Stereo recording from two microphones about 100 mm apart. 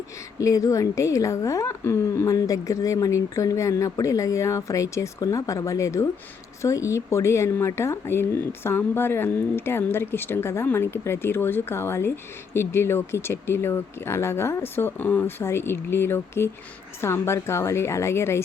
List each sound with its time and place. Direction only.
0.3 s a woman's voice: 35° left (ahead or behind)